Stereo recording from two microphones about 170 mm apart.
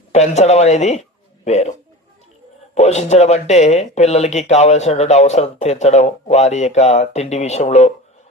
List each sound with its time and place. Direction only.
0.1 s speech: 40° left (ahead or behind)
2.7 s speech: 40° left (ahead or behind)